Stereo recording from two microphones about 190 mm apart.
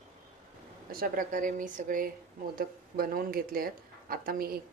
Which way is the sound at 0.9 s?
50° right (ahead or behind).